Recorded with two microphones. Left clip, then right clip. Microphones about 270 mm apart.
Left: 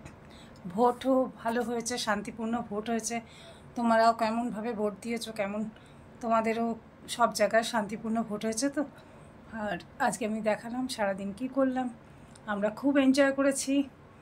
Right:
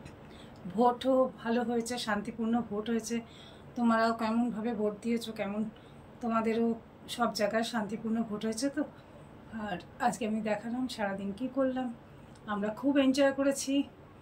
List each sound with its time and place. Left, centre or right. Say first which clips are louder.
0.7 s a woman's voice: left 1 dB; centre
12.4 s a woman's voice: left 3 dB; centre